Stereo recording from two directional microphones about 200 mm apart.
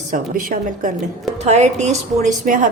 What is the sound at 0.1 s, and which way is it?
A woman's voice, 40° right (ahead or behind).